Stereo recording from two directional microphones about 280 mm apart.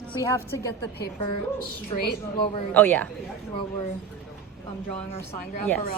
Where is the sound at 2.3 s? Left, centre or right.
Centre.